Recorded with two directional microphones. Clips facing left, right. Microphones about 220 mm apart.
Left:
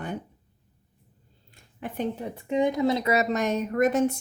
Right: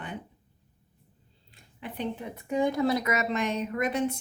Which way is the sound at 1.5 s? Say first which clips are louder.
Left 5 dB; 45° left (ahead or behind).